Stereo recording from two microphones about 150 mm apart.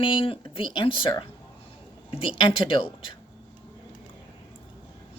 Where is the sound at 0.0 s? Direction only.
35° left (ahead or behind).